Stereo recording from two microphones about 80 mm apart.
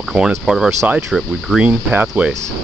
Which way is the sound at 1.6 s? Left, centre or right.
Centre.